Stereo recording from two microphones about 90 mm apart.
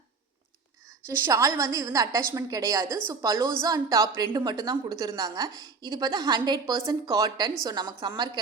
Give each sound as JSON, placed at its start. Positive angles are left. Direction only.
{"t": 1.3, "sound": "a woman's voice", "side_deg": -35}